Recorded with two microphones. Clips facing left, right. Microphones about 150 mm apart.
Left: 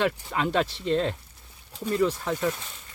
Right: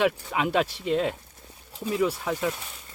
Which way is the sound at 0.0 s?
10° right (ahead or behind).